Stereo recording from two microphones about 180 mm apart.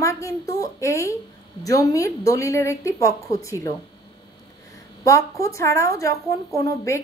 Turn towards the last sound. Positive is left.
turn(degrees=15)  # may be behind; listen again after turning